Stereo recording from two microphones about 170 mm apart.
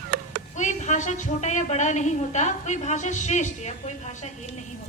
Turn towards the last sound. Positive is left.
turn(degrees=45)  # may be behind; listen again after turning